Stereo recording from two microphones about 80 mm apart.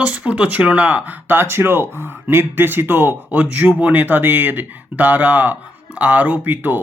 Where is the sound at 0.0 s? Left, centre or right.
Centre.